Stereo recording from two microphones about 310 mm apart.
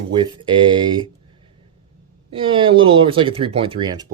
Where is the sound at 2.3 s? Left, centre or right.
Centre.